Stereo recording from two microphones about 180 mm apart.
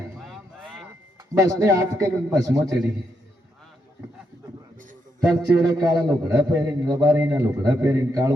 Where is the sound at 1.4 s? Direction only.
15° right (ahead or behind).